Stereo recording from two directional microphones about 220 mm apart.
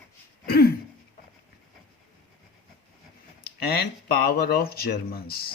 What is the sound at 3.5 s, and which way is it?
Speech, 45° left (ahead or behind).